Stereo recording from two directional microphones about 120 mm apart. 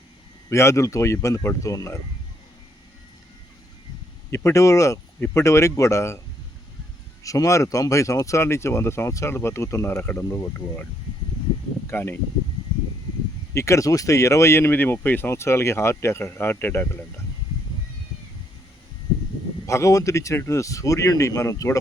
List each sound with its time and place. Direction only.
0.5 s speech: 25° left (ahead or behind)
4.3 s speech: 25° left (ahead or behind)
7.3 s speech: 25° left (ahead or behind)
11.9 s speech: 20° left (ahead or behind)
13.5 s speech: 25° left (ahead or behind)
19.6 s speech: 25° left (ahead or behind)